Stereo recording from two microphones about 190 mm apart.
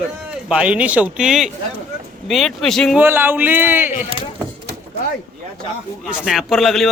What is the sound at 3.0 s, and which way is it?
Speech, 10° right (ahead or behind).